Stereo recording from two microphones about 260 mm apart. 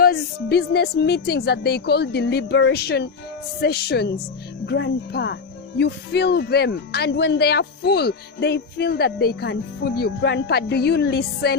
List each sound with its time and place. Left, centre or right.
0.0 s speech: left